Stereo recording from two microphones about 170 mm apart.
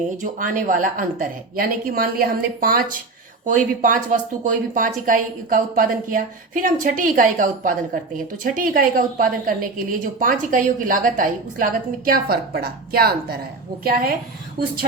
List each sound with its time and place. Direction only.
0.2 s speech: 50° right (ahead or behind)